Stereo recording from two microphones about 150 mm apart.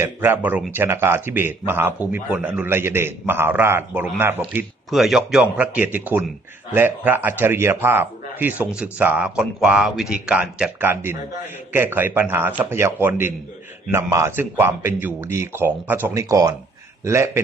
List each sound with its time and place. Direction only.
0.0 s a man's voice: 15° right (ahead or behind)
4.9 s a man's voice: centre (ahead or behind); by 17.4 s 20° right (ahead or behind)